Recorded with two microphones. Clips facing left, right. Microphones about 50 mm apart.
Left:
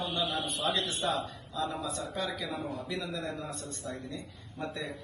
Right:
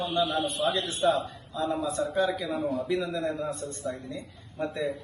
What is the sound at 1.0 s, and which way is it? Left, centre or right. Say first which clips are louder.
Speech: right 9 dB; centre.